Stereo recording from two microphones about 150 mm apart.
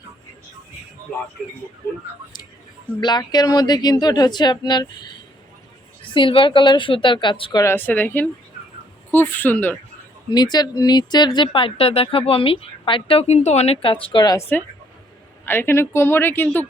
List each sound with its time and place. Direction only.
3.0 s speech: 30° left (ahead or behind)
7.6 s a woman's voice: 15° left (ahead or behind)
10.3 s speech: 25° left (ahead or behind)
15.4 s a woman's voice: 15° left (ahead or behind)